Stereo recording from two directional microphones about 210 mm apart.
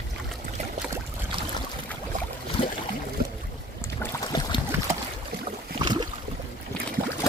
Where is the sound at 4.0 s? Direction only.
20° left (ahead or behind).